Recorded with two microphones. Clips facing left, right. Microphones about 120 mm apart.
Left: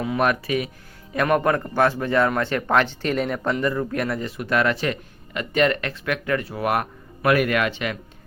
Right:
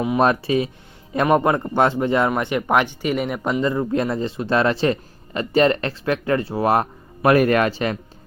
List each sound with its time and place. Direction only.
0.0 s a man's voice: 25° right (ahead or behind)